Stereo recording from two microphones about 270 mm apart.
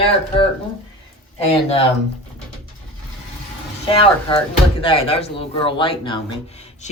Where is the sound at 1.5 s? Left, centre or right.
Left.